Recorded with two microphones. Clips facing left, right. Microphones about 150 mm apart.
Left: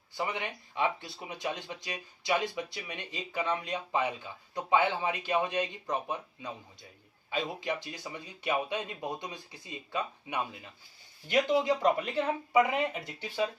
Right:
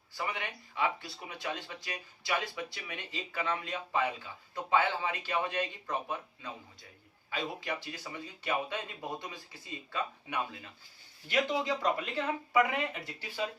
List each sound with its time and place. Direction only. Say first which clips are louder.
0.1 s speech: left 3 dB; 20° left (ahead or behind)